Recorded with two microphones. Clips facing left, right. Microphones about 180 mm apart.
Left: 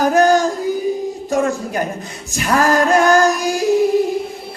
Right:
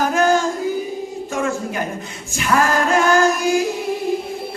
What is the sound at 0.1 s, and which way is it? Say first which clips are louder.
Music: left 4 dB; 40° left (ahead or behind).